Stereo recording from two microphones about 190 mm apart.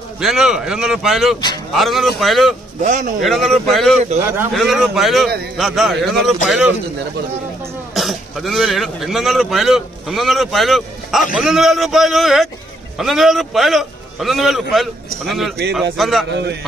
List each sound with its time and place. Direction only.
0.2 s speech: centre (ahead or behind)
2.8 s a man's voice: 40° right (ahead or behind)
3.2 s speech: centre (ahead or behind)
7.9 s speech: centre (ahead or behind)
16.3 s a man's voice: 65° right (ahead or behind)